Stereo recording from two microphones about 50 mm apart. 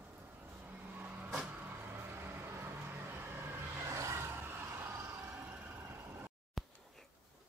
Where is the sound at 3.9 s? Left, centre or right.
Right.